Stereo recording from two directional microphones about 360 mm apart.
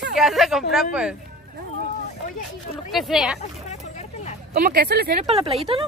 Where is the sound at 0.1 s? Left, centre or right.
Centre.